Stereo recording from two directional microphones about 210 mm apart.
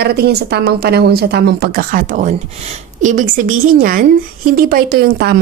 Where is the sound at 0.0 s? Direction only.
50° right (ahead or behind).